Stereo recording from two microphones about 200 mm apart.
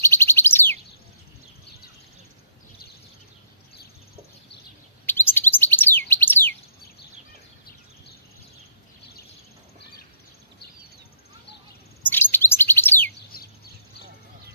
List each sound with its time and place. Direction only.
0.0 s bird: 10° left (ahead or behind)
5.0 s chirp: 10° left (ahead or behind)
12.0 s bird: 10° left (ahead or behind)
13.3 s insect: 50° left (ahead or behind)